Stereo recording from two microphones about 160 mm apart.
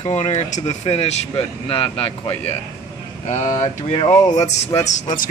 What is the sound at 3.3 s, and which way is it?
Speech, 50° left (ahead or behind).